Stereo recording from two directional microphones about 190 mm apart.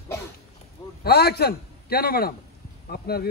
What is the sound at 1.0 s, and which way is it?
A man's voice, 55° left (ahead or behind).